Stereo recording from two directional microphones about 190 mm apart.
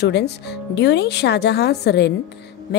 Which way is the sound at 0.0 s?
65° left (ahead or behind).